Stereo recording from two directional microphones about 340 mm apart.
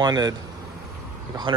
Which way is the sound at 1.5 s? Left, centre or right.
Centre.